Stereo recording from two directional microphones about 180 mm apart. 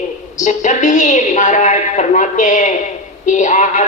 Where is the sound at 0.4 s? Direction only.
40° left (ahead or behind).